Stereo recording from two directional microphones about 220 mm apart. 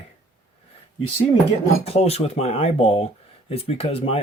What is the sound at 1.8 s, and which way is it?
Speech, 30° left (ahead or behind).